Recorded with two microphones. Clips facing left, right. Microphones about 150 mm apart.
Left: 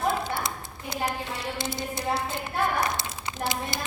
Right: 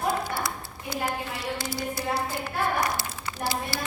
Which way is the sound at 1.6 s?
20° left (ahead or behind).